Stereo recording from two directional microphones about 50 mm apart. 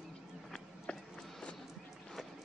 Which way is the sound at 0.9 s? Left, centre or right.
Left.